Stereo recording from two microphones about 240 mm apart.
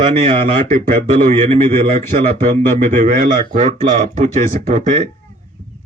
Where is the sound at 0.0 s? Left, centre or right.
Right.